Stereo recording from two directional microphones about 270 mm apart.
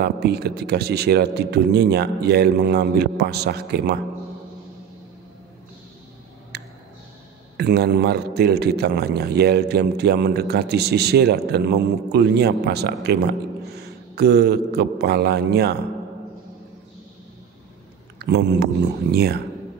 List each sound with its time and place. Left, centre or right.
0.0 s a man's voice: right
6.5 s tick-tock: right
7.5 s a man's voice: right
18.2 s a man's voice: right